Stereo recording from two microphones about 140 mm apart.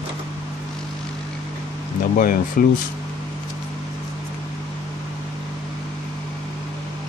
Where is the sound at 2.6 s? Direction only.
90° left.